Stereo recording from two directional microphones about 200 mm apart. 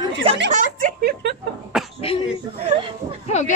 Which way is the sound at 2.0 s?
30° left (ahead or behind).